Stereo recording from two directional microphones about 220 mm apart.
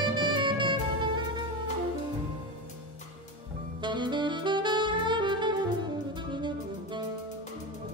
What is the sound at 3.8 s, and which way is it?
Saxophone, 20° right (ahead or behind).